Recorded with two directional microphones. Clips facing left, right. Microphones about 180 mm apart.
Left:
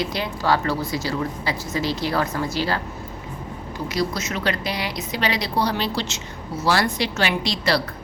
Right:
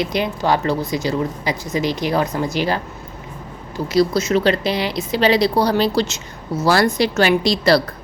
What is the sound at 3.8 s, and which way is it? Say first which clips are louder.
A woman's voice: right 9 dB; 30° right (ahead or behind).